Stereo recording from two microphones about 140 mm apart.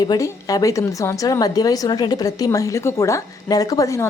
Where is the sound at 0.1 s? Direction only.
25° left (ahead or behind).